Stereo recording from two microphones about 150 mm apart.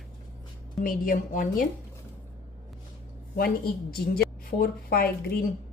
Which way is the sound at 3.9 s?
90° left.